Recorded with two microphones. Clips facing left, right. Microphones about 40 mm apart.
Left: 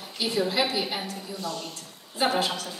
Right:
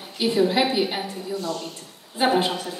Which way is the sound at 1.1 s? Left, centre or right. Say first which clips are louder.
Right 7 dB; centre.